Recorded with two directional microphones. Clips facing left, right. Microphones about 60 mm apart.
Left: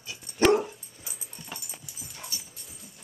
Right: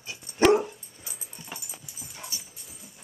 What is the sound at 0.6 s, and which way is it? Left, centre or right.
Dog, centre.